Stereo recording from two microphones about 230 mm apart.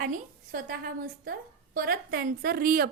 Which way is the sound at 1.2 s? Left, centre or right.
Right.